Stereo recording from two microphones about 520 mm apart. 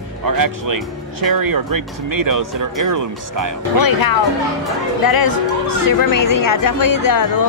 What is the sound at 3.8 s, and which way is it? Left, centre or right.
Speech, left.